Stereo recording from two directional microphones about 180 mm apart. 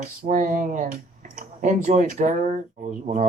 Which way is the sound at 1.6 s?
45° right (ahead or behind).